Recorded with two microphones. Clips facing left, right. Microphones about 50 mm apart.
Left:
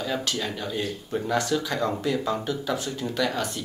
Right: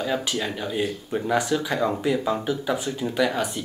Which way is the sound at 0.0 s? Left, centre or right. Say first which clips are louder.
Right 3 dB; centre.